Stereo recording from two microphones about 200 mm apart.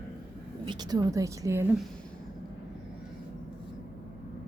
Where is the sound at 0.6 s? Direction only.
20° right (ahead or behind).